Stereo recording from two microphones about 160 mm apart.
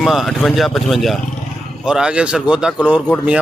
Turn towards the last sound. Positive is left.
turn(degrees=-5)  # may be behind; listen again after turning